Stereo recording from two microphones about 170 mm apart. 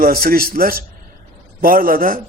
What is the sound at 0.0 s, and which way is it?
A man's voice, 60° right (ahead or behind).